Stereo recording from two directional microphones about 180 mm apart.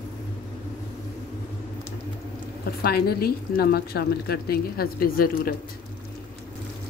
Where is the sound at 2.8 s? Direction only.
60° left (ahead or behind).